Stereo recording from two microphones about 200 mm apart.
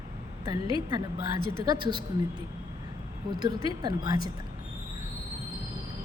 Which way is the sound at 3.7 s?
20° right (ahead or behind).